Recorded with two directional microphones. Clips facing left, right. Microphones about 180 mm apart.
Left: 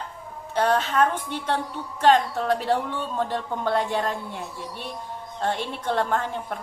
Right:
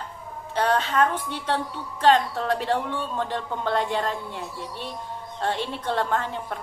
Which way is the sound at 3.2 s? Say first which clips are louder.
Left 1 dB; 45° left (ahead or behind).